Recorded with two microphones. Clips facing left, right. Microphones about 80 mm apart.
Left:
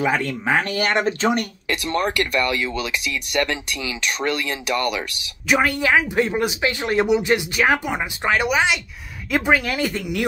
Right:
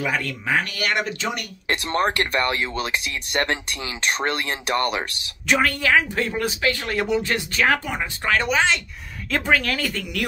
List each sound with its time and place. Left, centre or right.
0.0 s speech: left
1.7 s speech: right
5.6 s speech: centre